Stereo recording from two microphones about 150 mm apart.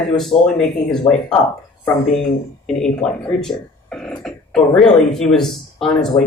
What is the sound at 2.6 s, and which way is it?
Speech, 5° left (ahead or behind).